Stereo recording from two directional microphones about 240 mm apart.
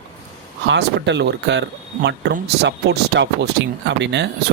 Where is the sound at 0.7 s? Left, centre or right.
Right.